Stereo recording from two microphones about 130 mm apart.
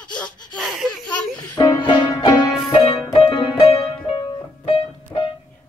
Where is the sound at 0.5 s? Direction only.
Centre (ahead or behind).